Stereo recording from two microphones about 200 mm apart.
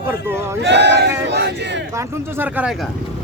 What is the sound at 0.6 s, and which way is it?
Speech, 60° right (ahead or behind).